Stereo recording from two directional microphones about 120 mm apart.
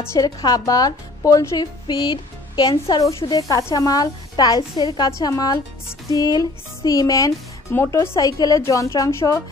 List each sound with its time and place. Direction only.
0.0 s speech: 25° left (ahead or behind)
8.2 s speech: 30° left (ahead or behind)